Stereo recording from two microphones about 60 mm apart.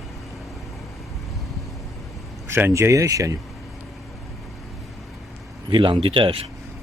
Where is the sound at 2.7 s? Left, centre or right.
Right.